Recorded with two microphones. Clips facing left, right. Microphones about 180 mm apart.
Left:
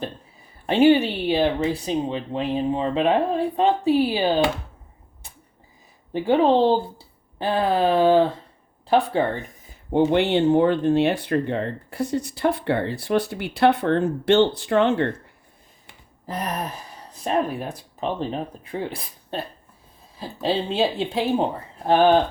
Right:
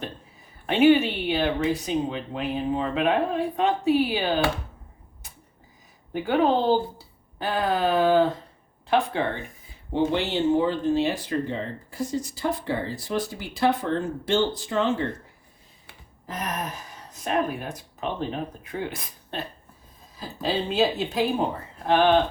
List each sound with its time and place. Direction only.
0.7 s speech: 30° left (ahead or behind)
6.1 s speech: 30° left (ahead or behind)
9.9 s speech: 55° left (ahead or behind)
16.2 s speech: 35° left (ahead or behind)